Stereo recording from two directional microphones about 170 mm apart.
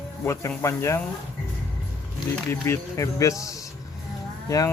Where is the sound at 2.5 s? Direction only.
15° left (ahead or behind).